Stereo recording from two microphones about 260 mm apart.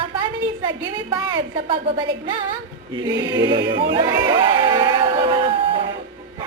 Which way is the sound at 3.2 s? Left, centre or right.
Centre.